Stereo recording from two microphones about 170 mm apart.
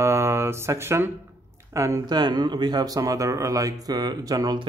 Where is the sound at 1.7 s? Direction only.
20° right (ahead or behind).